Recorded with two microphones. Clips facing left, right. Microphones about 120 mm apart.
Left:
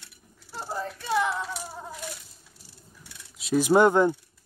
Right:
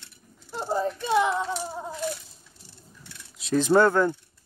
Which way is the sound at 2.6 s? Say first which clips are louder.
Right 2 dB; 10° left (ahead or behind).